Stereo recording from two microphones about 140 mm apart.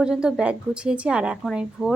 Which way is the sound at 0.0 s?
5° right (ahead or behind).